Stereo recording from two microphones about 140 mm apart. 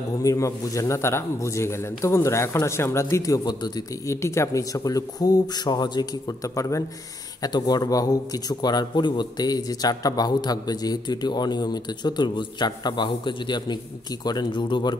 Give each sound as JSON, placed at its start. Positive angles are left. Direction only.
{"t": 0.2, "sound": "a man's voice", "side_deg": 25}